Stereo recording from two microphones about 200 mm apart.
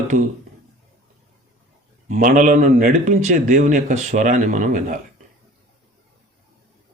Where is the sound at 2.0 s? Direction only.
40° right (ahead or behind).